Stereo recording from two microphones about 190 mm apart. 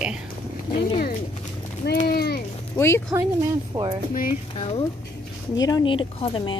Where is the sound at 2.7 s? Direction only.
15° left (ahead or behind).